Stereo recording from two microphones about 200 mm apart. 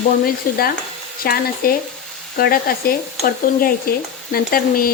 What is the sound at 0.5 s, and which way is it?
Speech, 45° left (ahead or behind).